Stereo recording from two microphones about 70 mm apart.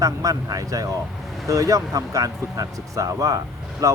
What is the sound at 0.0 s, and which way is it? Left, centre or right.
Speech, right.